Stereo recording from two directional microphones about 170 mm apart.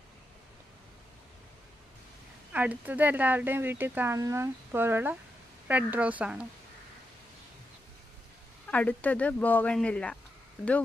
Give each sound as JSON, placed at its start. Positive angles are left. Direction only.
{"t": 2.5, "sound": "speech", "side_deg": -10}
{"t": 8.6, "sound": "speech", "side_deg": 10}